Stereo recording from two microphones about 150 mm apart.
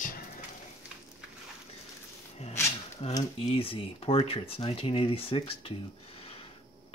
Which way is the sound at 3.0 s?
40° left (ahead or behind).